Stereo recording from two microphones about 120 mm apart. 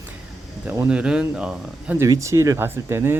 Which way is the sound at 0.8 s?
10° right (ahead or behind).